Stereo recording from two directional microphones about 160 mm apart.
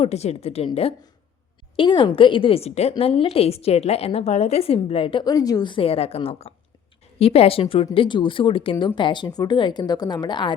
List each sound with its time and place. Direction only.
0.0 s a woman's voice: 40° left (ahead or behind)